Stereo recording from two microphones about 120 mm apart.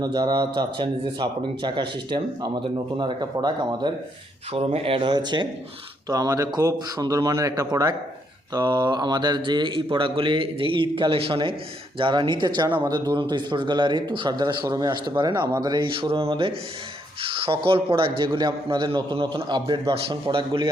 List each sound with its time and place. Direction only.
0.0 s speech: 35° right (ahead or behind)
4.5 s speech: 50° right (ahead or behind)